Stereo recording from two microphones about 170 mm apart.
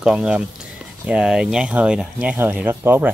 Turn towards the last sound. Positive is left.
turn(degrees=-10)  # may be behind; listen again after turning